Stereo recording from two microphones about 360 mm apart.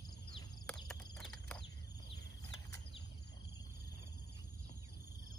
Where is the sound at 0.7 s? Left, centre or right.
Centre.